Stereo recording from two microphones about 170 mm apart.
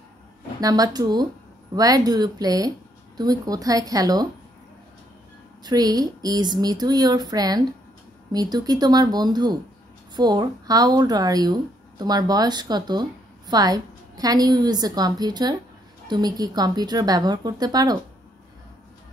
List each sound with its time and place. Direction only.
0.6 s speech: 20° right (ahead or behind)
5.6 s speech: 25° right (ahead or behind)